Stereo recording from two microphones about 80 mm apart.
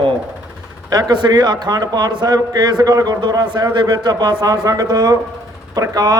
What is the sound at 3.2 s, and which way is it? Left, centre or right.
A man's voice, right.